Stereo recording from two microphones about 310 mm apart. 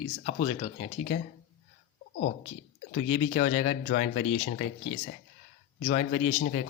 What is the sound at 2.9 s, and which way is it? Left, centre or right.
Speech, left.